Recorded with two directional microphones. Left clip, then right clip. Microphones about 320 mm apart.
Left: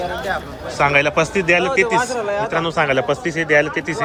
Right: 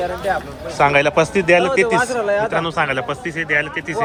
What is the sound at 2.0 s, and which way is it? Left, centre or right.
Speech, right.